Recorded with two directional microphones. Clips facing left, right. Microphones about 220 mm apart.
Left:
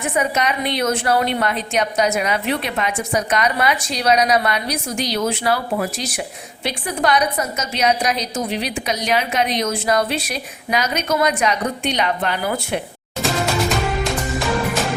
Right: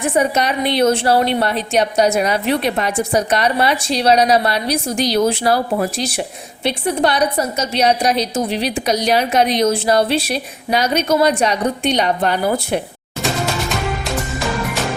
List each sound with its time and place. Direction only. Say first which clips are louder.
0.0 s a woman's voice: right 4 dB; 30° right (ahead or behind)
13.2 s music: left 1 dB; centre (ahead or behind)